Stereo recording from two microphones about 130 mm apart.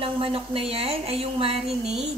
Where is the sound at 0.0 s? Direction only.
45° right (ahead or behind).